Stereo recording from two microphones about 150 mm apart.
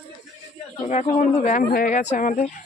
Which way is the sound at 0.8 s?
50° left (ahead or behind).